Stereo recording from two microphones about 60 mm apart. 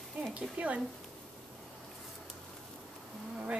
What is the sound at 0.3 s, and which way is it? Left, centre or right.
Speech, right.